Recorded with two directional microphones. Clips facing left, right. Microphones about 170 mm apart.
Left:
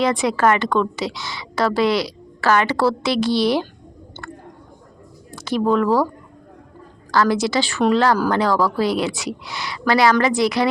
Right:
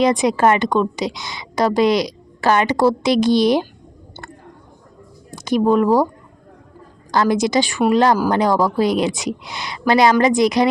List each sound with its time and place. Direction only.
0.0 s a woman's voice: 15° right (ahead or behind)
5.3 s speech: 15° right (ahead or behind)
7.1 s a woman's voice: 20° right (ahead or behind)